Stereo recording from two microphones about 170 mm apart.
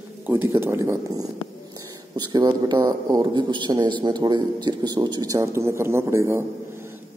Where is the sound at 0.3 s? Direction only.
10° right (ahead or behind).